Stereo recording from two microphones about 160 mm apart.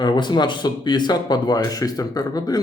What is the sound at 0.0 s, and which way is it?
Speech, 30° left (ahead or behind).